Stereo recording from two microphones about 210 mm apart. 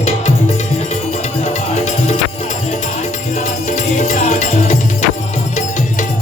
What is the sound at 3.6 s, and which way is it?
Music, 35° left (ahead or behind).